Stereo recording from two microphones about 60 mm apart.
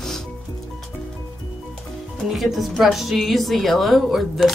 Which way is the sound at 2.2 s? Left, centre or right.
Centre.